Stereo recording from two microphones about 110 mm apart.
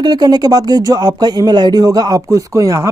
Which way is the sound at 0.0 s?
40° right (ahead or behind).